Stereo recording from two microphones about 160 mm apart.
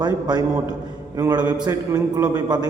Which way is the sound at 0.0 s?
25° right (ahead or behind).